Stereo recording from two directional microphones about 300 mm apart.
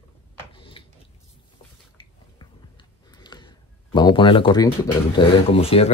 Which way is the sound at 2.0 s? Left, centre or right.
Centre.